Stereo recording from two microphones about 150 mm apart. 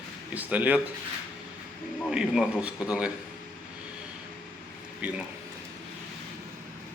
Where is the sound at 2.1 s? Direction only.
5° right (ahead or behind).